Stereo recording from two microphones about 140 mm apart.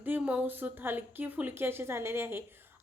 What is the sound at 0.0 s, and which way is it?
A woman's voice, 10° right (ahead or behind).